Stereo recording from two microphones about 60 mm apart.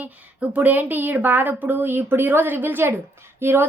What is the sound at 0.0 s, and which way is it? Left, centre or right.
A woman's voice, right.